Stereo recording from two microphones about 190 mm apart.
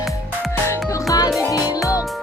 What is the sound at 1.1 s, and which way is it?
Music, 20° left (ahead or behind).